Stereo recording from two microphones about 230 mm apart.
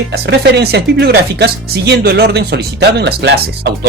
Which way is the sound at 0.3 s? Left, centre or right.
Right.